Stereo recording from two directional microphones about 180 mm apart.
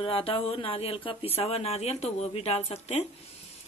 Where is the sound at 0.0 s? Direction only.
30° left (ahead or behind).